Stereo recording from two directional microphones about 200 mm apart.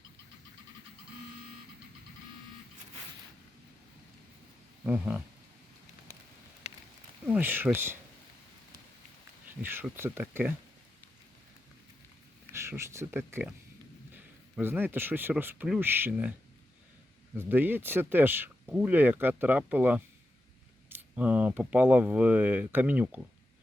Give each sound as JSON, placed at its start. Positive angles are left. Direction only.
{"t": 4.8, "sound": "speech", "side_deg": -10}
{"t": 6.6, "sound": "a sound", "side_deg": 35}
{"t": 7.3, "sound": "speech", "side_deg": -10}
{"t": 9.6, "sound": "speech", "side_deg": -10}
{"t": 12.5, "sound": "speech", "side_deg": -15}
{"t": 17.3, "sound": "speech", "side_deg": -10}